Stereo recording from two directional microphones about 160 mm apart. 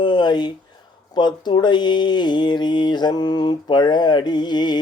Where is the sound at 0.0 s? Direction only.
25° left (ahead or behind).